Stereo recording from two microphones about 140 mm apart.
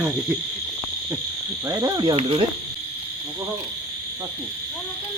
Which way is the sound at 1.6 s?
25° right (ahead or behind).